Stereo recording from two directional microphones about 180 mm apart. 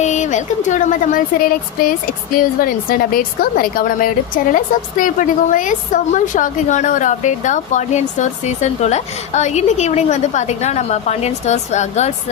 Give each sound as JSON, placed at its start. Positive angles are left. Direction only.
{"t": 0.0, "sound": "a woman's voice", "side_deg": 40}